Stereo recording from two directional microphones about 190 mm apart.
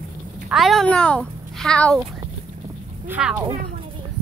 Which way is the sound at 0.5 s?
Centre (ahead or behind).